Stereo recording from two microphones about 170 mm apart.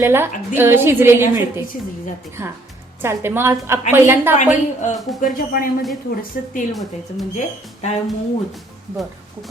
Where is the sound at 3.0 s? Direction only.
15° right (ahead or behind).